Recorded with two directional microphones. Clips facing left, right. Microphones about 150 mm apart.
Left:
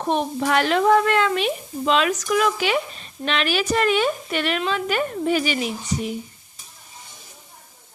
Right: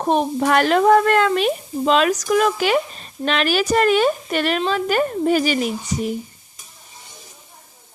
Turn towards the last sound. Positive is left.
turn(degrees=-45)  # may be behind; listen again after turning